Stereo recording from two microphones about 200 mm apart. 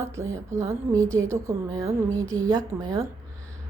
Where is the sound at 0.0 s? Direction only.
15° right (ahead or behind).